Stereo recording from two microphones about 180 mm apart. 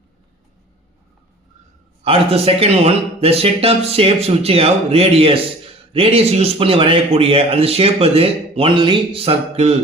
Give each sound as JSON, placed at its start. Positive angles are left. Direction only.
{"t": 2.0, "sound": "a man's voice", "side_deg": -30}